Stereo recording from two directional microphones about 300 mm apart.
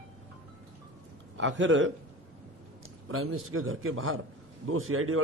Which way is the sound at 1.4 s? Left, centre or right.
Right.